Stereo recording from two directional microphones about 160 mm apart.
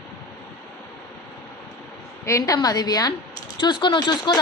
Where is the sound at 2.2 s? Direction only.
20° left (ahead or behind).